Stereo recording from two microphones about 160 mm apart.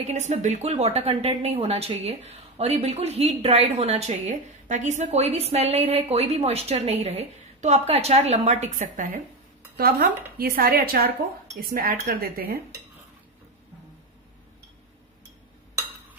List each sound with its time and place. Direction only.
0.0 s a woman's voice: 45° right (ahead or behind)
9.8 s speech: 70° right (ahead or behind)